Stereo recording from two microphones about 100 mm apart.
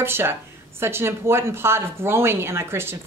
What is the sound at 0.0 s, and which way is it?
A woman's voice, 25° right (ahead or behind).